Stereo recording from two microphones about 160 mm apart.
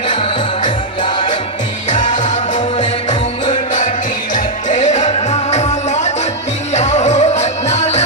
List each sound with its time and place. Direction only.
0.1 s music: 30° left (ahead or behind)
1.9 s music: 50° left (ahead or behind)
4.4 s music: 50° left (ahead or behind)